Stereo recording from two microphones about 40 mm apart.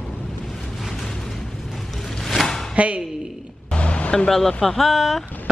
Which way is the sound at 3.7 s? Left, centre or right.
Left.